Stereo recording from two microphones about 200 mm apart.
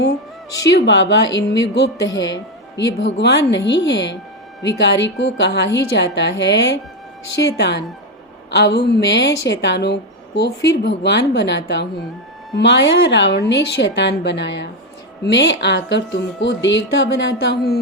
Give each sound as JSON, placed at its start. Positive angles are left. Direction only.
{"t": 0.6, "sound": "speech", "side_deg": 65}
{"t": 2.1, "sound": "speech", "side_deg": 20}
{"t": 2.7, "sound": "speech", "side_deg": 60}